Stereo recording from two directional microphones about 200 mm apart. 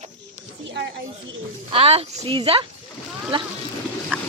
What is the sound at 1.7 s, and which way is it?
Speech, 30° right (ahead or behind).